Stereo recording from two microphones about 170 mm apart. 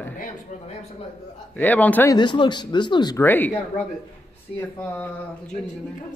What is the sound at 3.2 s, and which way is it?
Speech, 10° left (ahead or behind).